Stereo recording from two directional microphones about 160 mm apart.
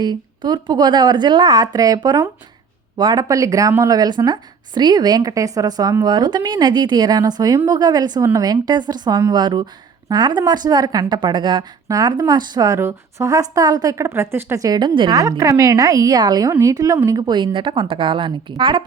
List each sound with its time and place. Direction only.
0.0 s a woman's voice: 25° right (ahead or behind)